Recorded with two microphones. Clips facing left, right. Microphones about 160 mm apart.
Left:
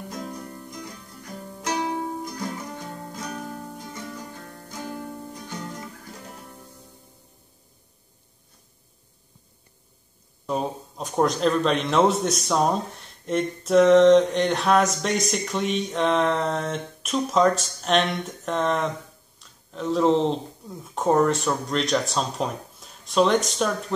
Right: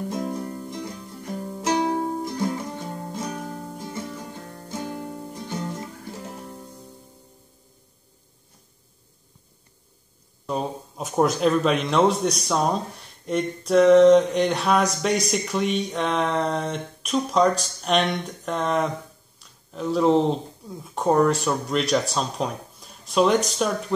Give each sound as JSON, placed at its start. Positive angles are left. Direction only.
{"t": 0.1, "sound": "music", "side_deg": -25}
{"t": 4.5, "sound": "music", "side_deg": -25}
{"t": 10.4, "sound": "speech", "side_deg": 0}